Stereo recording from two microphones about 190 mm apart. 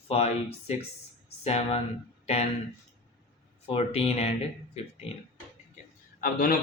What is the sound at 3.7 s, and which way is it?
Speech, 30° left (ahead or behind).